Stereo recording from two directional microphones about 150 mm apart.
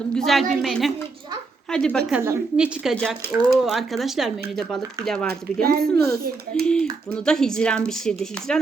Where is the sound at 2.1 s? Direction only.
15° right (ahead or behind); by 4.8 s centre (ahead or behind).